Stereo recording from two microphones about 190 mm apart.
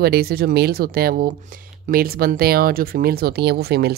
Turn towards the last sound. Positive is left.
turn(degrees=-55)  # may be behind; listen again after turning